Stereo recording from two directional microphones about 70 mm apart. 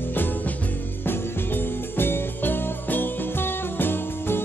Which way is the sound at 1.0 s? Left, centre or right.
Left.